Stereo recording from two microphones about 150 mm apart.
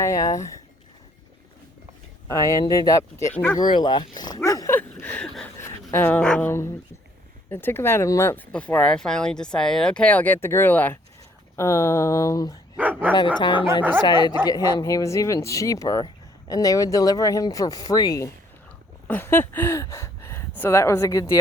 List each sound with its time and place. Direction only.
0.0 s speech: 20° left (ahead or behind)
2.2 s speech: 20° left (ahead or behind)
3.8 s speech: 30° left (ahead or behind)
4.4 s dog: 20° left (ahead or behind)
4.8 s a sound: 10° left (ahead or behind)
5.5 s speech: 15° left (ahead or behind)
12.7 s speech: 10° right (ahead or behind)
13.4 s speech: 30° left (ahead or behind)
19.0 s speech: 15° left (ahead or behind)